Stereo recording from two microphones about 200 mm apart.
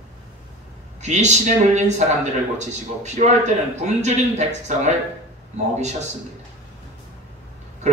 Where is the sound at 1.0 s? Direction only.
35° right (ahead or behind).